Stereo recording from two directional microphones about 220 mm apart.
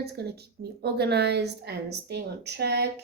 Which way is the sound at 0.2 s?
50° right (ahead or behind).